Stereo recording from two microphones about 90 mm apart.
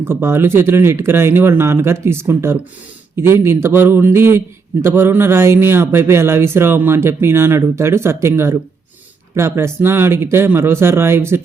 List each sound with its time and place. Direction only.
0.0 s a man's voice: 25° right (ahead or behind)